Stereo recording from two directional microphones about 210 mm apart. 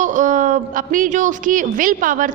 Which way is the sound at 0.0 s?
35° right (ahead or behind).